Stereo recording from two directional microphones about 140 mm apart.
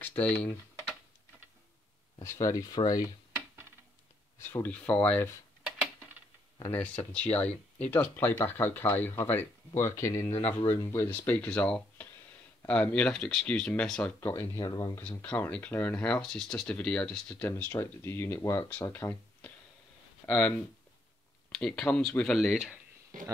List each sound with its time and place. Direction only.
0.0 s speech: 10° left (ahead or behind)
2.2 s speech: 25° left (ahead or behind)
4.4 s speech: 15° left (ahead or behind)
7.1 s speech: 10° left (ahead or behind)
15.0 s speech: 10° left (ahead or behind); by 22.8 s 5° right (ahead or behind)